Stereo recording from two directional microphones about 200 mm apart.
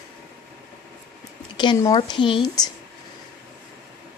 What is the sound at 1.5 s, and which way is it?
Speech, 25° left (ahead or behind).